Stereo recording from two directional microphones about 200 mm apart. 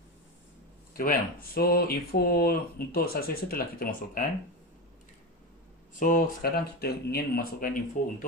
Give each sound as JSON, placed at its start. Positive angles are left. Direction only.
{"t": 0.9, "sound": "speech", "side_deg": 45}
{"t": 5.9, "sound": "speech", "side_deg": 40}